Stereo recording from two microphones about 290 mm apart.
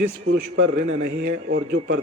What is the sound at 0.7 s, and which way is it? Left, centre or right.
A man's voice, right.